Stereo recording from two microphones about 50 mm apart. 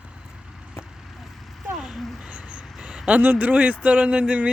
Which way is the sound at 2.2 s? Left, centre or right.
Centre.